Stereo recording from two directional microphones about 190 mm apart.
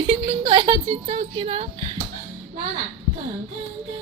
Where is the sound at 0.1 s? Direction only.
30° right (ahead or behind).